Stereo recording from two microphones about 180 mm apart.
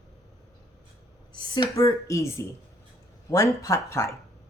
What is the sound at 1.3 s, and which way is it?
Speech, 25° left (ahead or behind).